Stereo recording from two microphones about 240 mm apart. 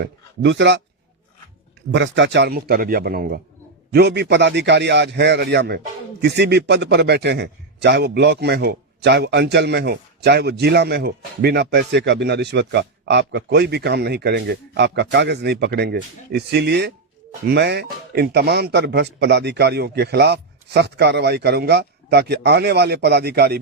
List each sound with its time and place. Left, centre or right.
0.0 s a man's voice: right
1.9 s a man's voice: right